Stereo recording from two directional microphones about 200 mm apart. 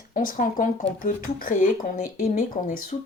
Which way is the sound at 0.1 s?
45° left (ahead or behind).